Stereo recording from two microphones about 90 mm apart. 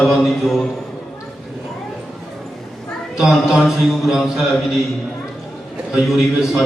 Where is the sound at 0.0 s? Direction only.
Centre (ahead or behind).